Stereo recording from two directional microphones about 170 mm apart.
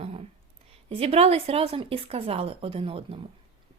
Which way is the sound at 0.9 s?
35° right (ahead or behind).